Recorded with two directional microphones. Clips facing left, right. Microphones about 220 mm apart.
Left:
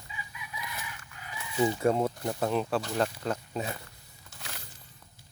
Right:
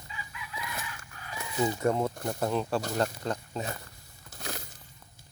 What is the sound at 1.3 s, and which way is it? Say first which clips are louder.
Chicken: even; 40° right (ahead or behind).